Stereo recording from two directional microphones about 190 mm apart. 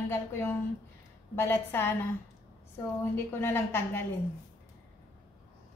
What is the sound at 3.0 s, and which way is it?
A woman's voice, 10° left (ahead or behind).